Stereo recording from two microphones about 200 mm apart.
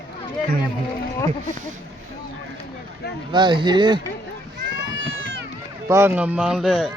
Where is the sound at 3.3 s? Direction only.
25° right (ahead or behind).